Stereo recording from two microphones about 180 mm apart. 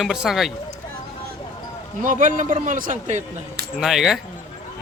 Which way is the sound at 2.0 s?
45° right (ahead or behind).